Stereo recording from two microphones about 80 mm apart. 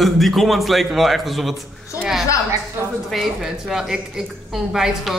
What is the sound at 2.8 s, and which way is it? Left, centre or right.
Speech, right.